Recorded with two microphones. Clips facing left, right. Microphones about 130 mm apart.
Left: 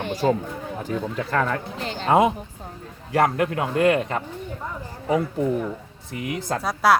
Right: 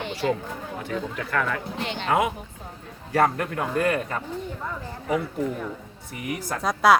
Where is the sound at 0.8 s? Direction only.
35° left (ahead or behind).